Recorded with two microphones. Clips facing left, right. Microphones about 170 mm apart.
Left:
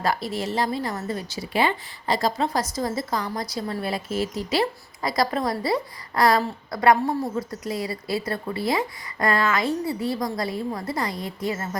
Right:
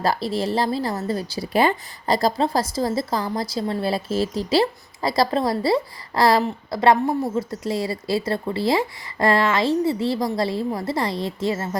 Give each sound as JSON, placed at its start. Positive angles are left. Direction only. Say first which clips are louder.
{"t": 0.0, "sound": "a woman's voice", "louder": "right 3 dB", "side_deg": -30}